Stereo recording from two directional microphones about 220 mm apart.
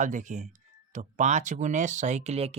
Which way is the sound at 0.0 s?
35° right (ahead or behind).